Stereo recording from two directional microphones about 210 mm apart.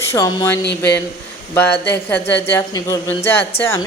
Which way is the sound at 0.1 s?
15° left (ahead or behind).